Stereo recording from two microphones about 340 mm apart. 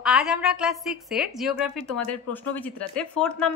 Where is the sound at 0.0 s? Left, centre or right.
Centre.